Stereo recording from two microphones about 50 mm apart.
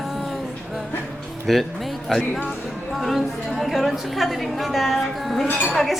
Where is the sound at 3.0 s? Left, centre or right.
Centre.